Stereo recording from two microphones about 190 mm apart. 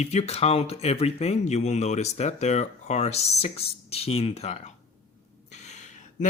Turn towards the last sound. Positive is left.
turn(degrees=40)  # may be behind; listen again after turning